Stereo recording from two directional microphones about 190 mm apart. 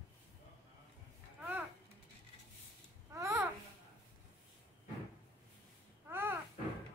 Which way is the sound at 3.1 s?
15° right (ahead or behind).